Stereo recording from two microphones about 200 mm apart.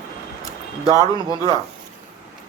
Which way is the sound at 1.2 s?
25° right (ahead or behind).